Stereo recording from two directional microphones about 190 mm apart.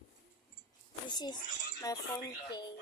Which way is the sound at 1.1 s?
20° left (ahead or behind).